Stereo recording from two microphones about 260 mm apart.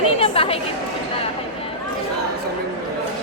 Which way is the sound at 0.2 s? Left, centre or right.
Left.